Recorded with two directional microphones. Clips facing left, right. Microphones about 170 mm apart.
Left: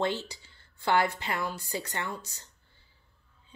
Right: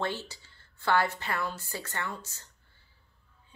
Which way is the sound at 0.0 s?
15° left (ahead or behind).